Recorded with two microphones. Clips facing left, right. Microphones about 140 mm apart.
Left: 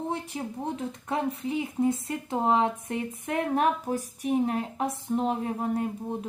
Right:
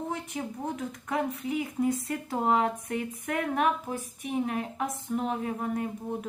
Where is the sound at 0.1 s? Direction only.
30° left (ahead or behind).